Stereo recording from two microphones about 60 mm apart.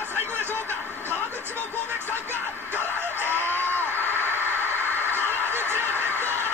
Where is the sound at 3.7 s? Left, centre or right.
Left.